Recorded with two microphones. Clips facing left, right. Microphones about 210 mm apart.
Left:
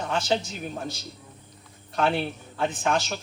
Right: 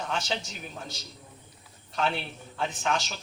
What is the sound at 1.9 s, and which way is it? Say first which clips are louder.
A man's voice: left 5 dB; 55° left (ahead or behind).